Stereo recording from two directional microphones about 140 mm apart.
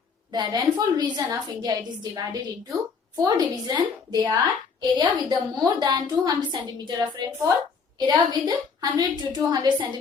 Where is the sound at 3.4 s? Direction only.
30° right (ahead or behind).